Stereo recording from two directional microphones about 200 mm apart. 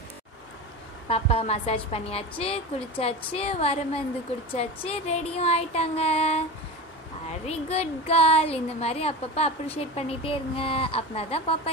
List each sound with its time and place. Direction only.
1.0 s a woman's voice: 30° left (ahead or behind)